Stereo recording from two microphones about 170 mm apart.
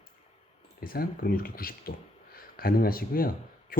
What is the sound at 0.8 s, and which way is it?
Speech, 60° left (ahead or behind).